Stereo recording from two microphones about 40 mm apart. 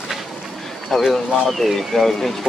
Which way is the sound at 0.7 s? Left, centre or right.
Centre.